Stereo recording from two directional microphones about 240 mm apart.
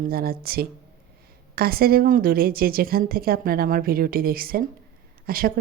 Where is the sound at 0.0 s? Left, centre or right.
Right.